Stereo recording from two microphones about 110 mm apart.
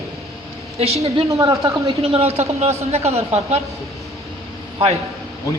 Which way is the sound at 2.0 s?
65° right (ahead or behind).